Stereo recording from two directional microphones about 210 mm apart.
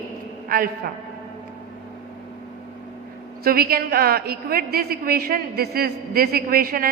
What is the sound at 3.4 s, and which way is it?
A woman's voice, 45° right (ahead or behind).